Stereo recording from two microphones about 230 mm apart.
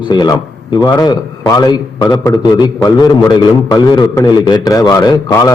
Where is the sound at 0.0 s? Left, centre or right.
Centre.